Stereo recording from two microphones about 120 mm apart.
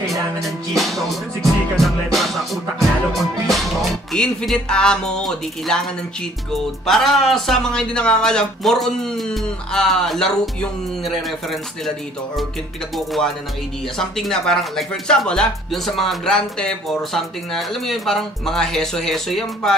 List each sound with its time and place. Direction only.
0.4 s speech: centre (ahead or behind)
3.1 s music: centre (ahead or behind)
4.1 s speech: 5° left (ahead or behind)
12.9 s speech: centre (ahead or behind)